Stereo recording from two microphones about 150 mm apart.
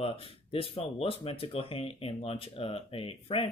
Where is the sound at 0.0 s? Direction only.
40° left (ahead or behind).